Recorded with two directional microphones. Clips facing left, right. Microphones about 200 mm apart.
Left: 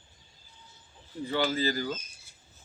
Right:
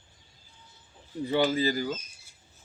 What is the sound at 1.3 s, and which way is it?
Speech, 15° right (ahead or behind).